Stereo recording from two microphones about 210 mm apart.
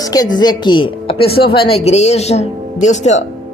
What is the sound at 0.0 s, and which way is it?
A woman's voice, 15° left (ahead or behind).